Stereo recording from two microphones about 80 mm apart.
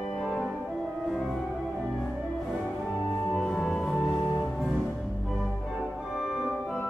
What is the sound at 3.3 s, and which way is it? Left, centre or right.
Music, centre.